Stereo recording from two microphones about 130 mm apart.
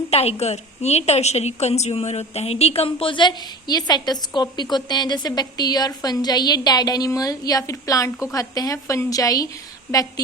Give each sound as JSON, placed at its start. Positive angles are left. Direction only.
{"t": 0.1, "sound": "a woman's voice", "side_deg": 50}